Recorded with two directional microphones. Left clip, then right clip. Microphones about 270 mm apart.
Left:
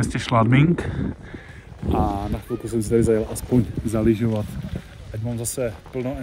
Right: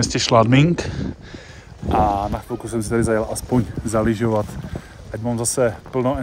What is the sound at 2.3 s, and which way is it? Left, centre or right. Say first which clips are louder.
Speech: right 3 dB; centre.